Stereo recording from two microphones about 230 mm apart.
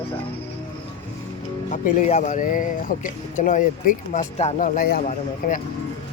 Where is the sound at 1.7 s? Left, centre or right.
Left.